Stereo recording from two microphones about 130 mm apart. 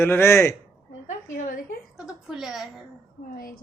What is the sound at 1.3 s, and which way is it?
Speech, 90° left.